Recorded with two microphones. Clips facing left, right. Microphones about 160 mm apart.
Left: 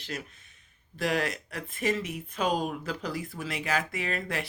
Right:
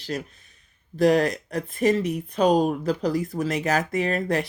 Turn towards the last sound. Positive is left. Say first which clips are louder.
# right 9 dB
turn(degrees=-40)  # may be behind; listen again after turning